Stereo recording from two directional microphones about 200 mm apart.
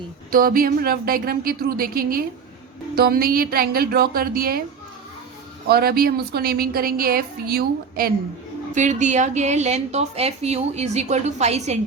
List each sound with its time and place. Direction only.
0.3 s a woman's voice: 45° right (ahead or behind)
5.6 s a woman's voice: 50° right (ahead or behind)
8.7 s a woman's voice: 40° right (ahead or behind)